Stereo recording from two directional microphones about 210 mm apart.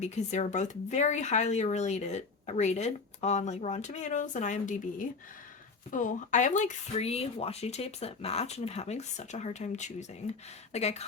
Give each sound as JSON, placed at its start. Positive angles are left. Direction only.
{"t": 0.0, "sound": "speech", "side_deg": 35}